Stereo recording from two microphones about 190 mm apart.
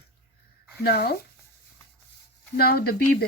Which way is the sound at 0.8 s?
55° left (ahead or behind).